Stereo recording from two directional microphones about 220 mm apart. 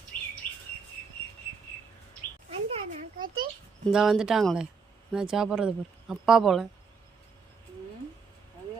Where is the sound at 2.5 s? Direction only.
25° right (ahead or behind).